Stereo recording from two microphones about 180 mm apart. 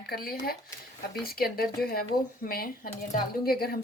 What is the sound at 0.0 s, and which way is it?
Speech, 60° left (ahead or behind).